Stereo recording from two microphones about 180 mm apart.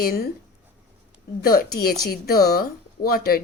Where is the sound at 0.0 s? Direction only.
55° left (ahead or behind).